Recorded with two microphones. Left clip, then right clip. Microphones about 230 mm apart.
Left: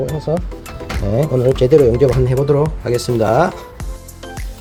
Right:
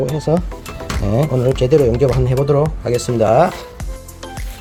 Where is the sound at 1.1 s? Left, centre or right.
Centre.